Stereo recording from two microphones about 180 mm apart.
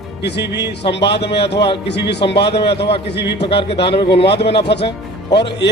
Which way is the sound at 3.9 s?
30° left (ahead or behind).